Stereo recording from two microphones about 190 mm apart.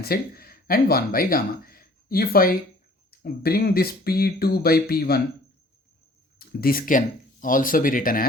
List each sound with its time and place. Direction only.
0.0 s speech: 55° left (ahead or behind)
6.4 s speech: 50° left (ahead or behind)